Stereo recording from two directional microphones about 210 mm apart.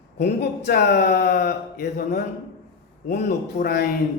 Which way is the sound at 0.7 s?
50° left (ahead or behind).